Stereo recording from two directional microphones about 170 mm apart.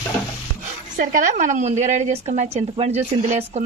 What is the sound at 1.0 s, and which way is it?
Speech, 55° right (ahead or behind).